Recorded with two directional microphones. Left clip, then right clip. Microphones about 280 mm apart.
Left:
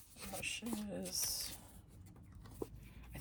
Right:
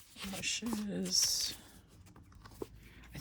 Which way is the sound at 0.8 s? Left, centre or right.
Right.